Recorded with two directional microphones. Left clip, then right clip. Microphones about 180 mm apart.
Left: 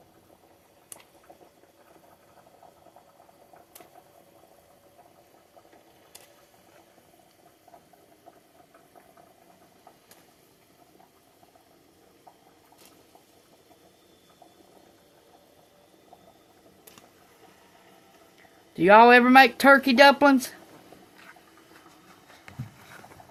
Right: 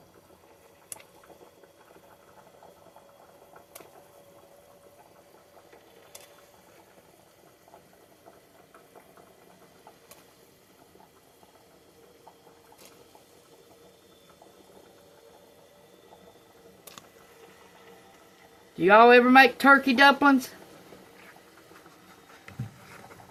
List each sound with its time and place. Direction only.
18.8 s speech: 50° left (ahead or behind)